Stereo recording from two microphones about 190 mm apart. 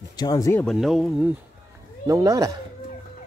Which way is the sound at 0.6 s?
Centre (ahead or behind).